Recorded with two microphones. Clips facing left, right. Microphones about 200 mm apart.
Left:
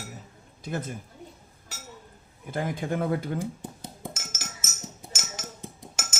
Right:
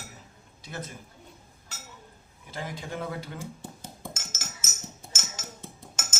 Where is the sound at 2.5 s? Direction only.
50° left (ahead or behind).